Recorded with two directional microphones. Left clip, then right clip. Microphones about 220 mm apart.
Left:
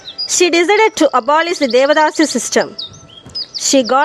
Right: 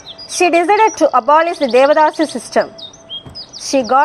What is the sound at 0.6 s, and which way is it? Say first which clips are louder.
A woman's voice: even; 40° left (ahead or behind).